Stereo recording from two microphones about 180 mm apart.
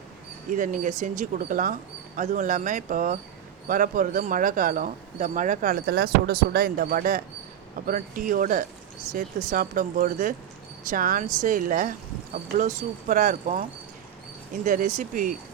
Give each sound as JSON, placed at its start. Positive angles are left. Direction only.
{"t": 0.5, "sound": "speech", "side_deg": -45}